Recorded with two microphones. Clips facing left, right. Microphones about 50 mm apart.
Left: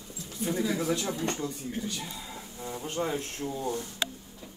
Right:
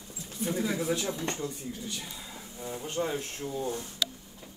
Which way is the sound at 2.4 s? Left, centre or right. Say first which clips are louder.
Right 1 dB; left.